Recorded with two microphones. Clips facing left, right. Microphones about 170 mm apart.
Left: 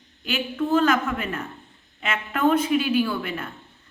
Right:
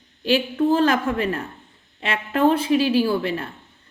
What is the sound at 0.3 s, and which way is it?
A woman's voice, 35° right (ahead or behind).